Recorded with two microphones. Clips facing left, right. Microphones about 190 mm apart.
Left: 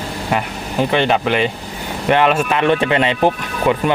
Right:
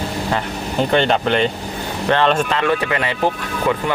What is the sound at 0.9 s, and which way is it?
Speech, 5° left (ahead or behind).